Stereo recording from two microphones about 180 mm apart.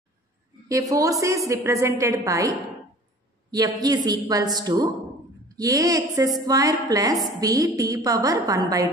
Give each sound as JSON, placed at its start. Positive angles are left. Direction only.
{"t": 0.7, "sound": "a woman's voice", "side_deg": -15}
{"t": 3.5, "sound": "a woman's voice", "side_deg": -20}